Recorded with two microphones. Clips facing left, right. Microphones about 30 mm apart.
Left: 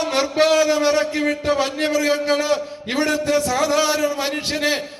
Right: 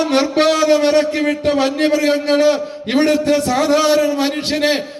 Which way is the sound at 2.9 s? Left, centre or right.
Right.